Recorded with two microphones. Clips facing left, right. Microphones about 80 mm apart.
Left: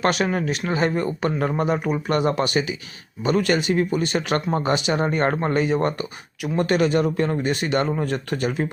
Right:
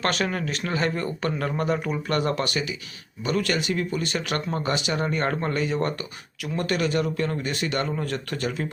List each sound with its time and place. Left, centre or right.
0.0 s speech: centre